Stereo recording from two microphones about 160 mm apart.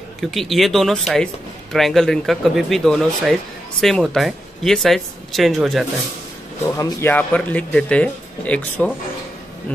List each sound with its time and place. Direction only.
0.2 s speech: centre (ahead or behind)
6.8 s speech: 15° left (ahead or behind)